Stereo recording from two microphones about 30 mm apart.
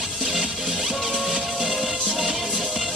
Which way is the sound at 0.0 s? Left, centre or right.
Centre.